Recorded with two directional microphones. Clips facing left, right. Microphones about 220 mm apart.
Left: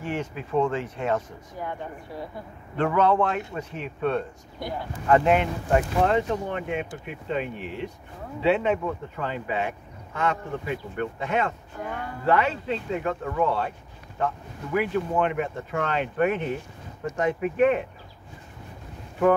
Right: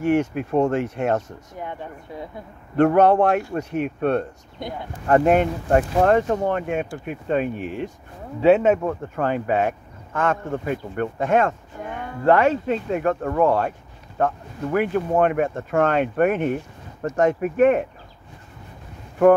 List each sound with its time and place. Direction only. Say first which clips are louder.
0.0 s speech: right 11 dB; 65° right (ahead or behind); by 0.7 s 45° right (ahead or behind)
0.7 s speech: right 6 dB; 70° right (ahead or behind)
2.1 s speech: right 2 dB; 20° right (ahead or behind)
2.8 s speech: right 7 dB; 65° right (ahead or behind)
3.2 s speech: right 6 dB; 55° right (ahead or behind)